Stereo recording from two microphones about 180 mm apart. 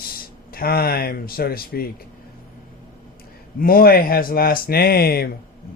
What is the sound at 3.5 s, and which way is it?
Speech, 55° left (ahead or behind).